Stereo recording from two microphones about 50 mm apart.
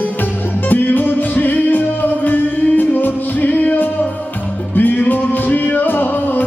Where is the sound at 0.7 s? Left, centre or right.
Left.